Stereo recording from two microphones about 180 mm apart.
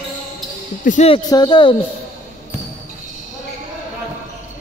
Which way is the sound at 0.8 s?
35° left (ahead or behind).